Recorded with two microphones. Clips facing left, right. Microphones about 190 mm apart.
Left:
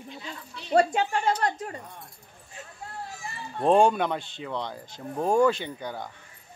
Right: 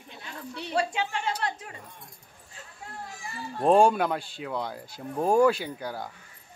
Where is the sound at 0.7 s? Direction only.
45° left (ahead or behind).